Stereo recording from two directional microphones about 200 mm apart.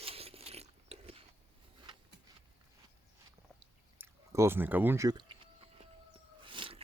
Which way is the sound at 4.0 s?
10° right (ahead or behind).